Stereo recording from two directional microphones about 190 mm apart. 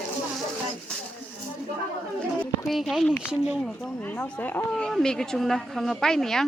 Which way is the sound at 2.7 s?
Centre (ahead or behind).